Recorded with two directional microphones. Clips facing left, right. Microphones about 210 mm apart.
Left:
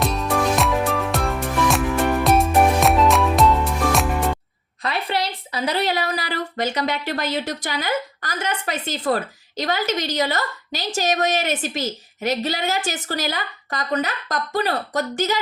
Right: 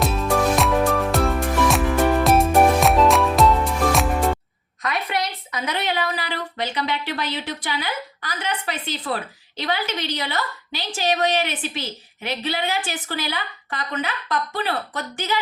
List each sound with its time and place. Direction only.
0.0 s music: centre (ahead or behind)
4.8 s a woman's voice: 30° left (ahead or behind)